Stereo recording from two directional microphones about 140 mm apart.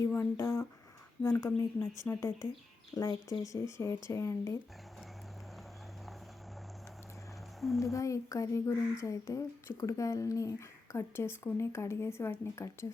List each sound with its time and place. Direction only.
0.0 s speech: 20° left (ahead or behind)
2.0 s speech: 20° left (ahead or behind)
7.6 s speech: centre (ahead or behind)
7.9 s speech: 25° left (ahead or behind)